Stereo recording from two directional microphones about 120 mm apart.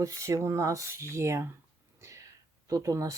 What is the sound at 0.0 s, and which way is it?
Speech, 25° right (ahead or behind).